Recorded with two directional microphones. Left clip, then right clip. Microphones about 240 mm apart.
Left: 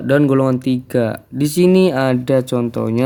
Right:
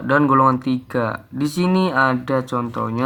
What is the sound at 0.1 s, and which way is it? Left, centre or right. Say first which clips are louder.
Speech: even; left.